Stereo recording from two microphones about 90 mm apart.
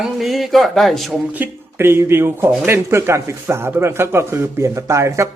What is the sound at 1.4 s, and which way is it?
Speech, 25° right (ahead or behind).